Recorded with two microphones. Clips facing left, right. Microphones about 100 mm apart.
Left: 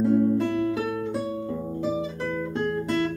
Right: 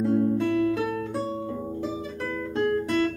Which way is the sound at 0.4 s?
25° left (ahead or behind).